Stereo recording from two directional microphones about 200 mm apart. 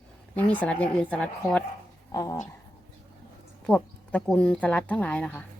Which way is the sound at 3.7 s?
5° left (ahead or behind).